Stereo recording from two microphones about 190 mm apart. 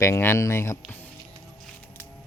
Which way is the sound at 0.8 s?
10° left (ahead or behind).